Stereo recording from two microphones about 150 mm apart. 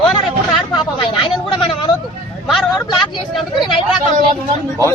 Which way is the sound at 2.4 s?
Centre (ahead or behind).